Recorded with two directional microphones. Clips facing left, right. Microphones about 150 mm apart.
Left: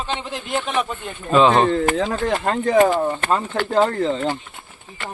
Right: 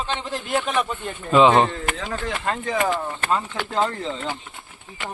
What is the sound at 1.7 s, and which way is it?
Speech, 40° left (ahead or behind).